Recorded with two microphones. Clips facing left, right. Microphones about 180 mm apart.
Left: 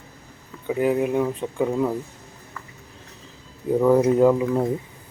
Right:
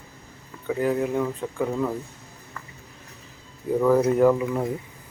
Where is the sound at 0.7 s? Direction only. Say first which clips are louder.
Left 3 dB; 20° left (ahead or behind).